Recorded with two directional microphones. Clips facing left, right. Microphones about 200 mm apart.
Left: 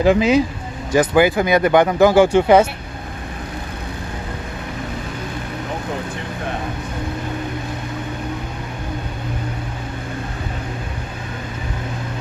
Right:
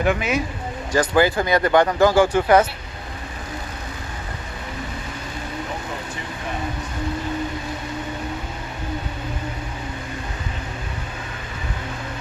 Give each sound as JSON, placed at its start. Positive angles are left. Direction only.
{"t": 0.0, "sound": "speech", "side_deg": 30}
{"t": 0.9, "sound": "speech", "side_deg": 15}